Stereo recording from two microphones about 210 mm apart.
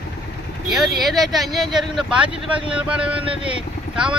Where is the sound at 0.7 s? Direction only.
Centre (ahead or behind).